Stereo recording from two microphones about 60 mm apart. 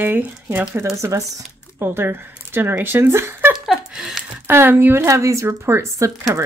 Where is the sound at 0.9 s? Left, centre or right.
Right.